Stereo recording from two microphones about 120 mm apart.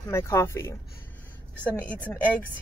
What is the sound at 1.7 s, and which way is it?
Speech, 10° left (ahead or behind).